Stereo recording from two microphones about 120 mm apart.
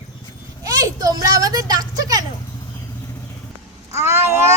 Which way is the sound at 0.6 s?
30° right (ahead or behind).